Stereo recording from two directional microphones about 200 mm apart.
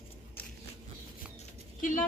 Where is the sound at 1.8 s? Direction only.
40° left (ahead or behind).